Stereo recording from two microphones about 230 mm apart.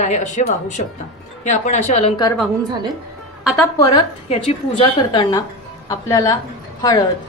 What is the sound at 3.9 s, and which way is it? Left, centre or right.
A woman's voice, left.